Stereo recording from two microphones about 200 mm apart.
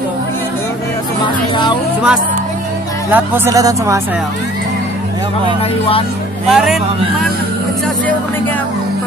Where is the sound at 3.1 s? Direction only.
15° right (ahead or behind).